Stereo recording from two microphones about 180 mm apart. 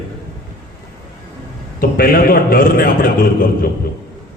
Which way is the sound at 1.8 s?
55° left (ahead or behind).